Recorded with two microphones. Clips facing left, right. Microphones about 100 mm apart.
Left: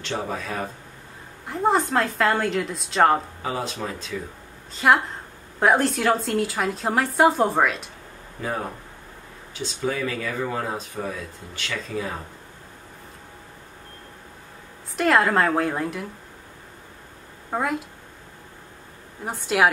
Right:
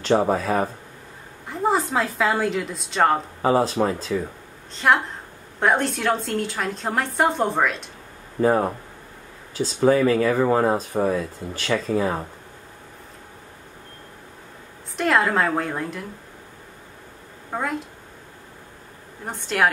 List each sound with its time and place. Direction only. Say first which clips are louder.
0.0 s speech: right 9 dB; 45° right (ahead or behind)
1.5 s a woman's voice: left 1 dB; centre (ahead or behind)
3.4 s speech: right 15 dB; 40° right (ahead or behind)
4.7 s a woman's voice: left 1 dB; centre (ahead or behind)
8.4 s speech: right 10 dB; 40° right (ahead or behind)
15.0 s a woman's voice: left 1 dB; centre (ahead or behind)
17.5 s a woman's voice: left 1 dB; 5° left (ahead or behind)
19.2 s a woman's voice: left 1 dB; 5° left (ahead or behind)